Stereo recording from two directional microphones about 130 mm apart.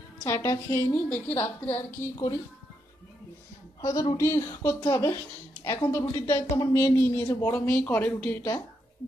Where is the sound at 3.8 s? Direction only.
25° left (ahead or behind).